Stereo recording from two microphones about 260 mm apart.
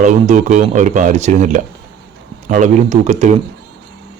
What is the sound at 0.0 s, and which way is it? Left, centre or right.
Speech, right.